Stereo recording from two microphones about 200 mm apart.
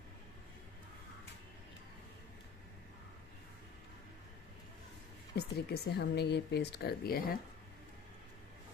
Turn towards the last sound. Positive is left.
turn(degrees=50)  # may be behind; listen again after turning